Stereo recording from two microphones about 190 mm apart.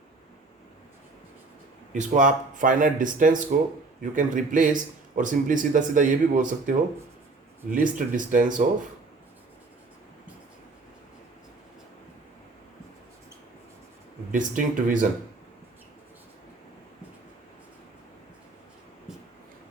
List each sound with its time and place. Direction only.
1.9 s speech: 40° right (ahead or behind)
14.3 s speech: 45° right (ahead or behind)